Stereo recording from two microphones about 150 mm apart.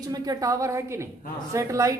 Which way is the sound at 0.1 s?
25° right (ahead or behind).